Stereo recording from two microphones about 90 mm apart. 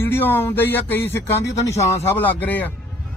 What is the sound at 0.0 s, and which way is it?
Speech, 25° left (ahead or behind).